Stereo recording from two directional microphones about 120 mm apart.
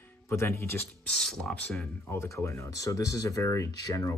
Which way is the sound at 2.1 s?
25° left (ahead or behind).